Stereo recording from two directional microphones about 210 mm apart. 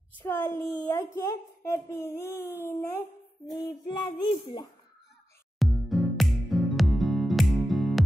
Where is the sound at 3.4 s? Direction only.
20° left (ahead or behind).